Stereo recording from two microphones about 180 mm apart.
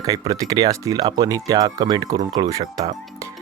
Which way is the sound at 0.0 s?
20° right (ahead or behind).